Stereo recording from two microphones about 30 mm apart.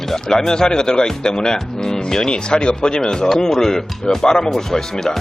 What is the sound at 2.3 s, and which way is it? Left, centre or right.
Speech, left.